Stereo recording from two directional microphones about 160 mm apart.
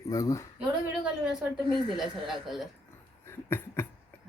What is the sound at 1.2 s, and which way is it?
Speech, 5° right (ahead or behind).